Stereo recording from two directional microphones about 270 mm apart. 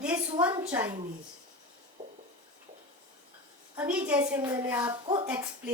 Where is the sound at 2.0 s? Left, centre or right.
Right.